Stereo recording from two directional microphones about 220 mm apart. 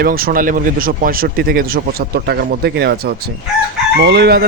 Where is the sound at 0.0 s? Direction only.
40° right (ahead or behind).